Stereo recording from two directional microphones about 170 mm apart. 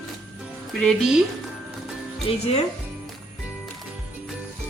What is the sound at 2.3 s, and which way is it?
Speech, 30° left (ahead or behind).